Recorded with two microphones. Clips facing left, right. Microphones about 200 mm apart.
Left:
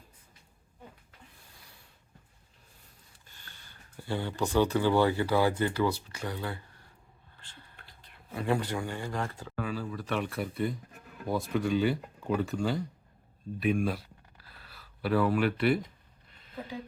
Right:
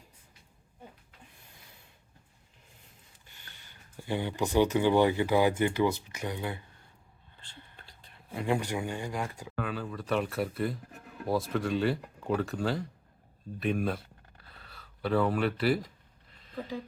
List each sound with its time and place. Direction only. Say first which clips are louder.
3.2 s speech: left 1 dB; 15° right (ahead or behind)
8.3 s speech: even; 15° right (ahead or behind)
9.6 s speech: even; centre (ahead or behind)